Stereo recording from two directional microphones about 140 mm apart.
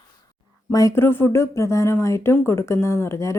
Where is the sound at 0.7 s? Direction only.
20° left (ahead or behind).